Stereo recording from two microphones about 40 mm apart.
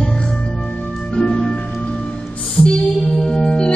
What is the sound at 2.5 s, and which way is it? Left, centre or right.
Music, left.